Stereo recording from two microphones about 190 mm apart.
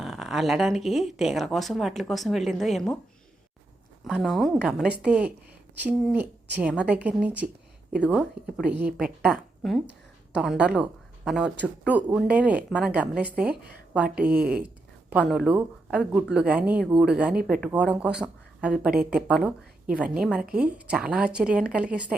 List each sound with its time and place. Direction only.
0.0 s speech: centre (ahead or behind)
4.0 s speech: centre (ahead or behind)